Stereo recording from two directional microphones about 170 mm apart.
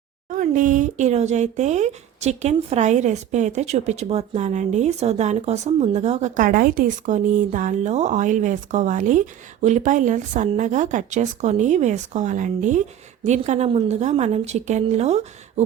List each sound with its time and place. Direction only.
0.3 s a woman's voice: 50° right (ahead or behind)